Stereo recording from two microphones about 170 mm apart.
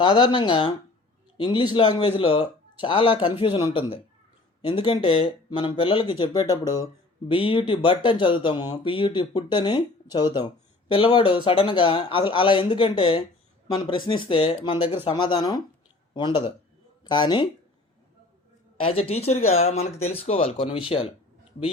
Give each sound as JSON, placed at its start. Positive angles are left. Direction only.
{"t": 0.0, "sound": "speech", "side_deg": 25}
{"t": 7.3, "sound": "speech", "side_deg": 30}
{"t": 18.8, "sound": "speech", "side_deg": 35}